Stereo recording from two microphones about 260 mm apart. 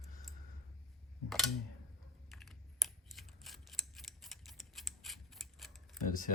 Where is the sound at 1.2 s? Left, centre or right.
Centre.